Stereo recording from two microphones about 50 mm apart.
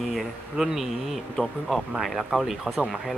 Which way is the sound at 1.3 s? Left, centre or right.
Centre.